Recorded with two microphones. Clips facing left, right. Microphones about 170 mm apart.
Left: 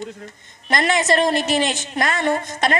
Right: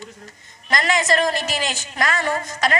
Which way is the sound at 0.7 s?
25° left (ahead or behind).